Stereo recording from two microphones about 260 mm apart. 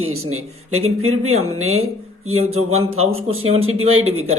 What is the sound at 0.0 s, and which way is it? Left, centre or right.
Speech, right.